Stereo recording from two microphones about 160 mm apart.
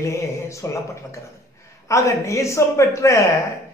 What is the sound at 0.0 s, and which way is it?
Speech, 20° left (ahead or behind).